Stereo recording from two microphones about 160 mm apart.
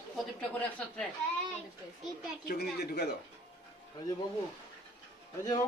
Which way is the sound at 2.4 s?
75° left (ahead or behind).